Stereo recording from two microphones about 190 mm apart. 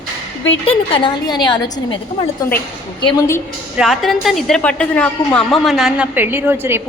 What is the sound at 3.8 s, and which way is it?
A woman's voice, centre (ahead or behind).